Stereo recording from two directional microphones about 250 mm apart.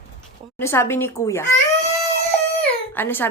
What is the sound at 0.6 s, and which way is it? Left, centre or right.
Speech, centre.